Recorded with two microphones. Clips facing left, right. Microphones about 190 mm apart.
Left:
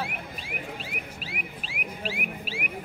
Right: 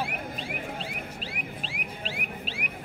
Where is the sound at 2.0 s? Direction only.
10° left (ahead or behind).